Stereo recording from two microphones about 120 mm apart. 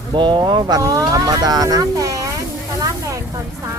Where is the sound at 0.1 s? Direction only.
40° right (ahead or behind).